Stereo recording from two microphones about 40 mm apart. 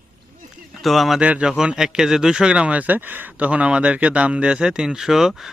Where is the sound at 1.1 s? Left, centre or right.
Right.